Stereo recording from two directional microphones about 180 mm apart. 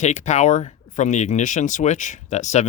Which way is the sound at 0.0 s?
40° left (ahead or behind).